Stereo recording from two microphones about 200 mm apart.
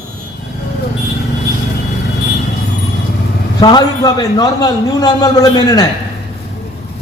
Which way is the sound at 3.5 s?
20° left (ahead or behind).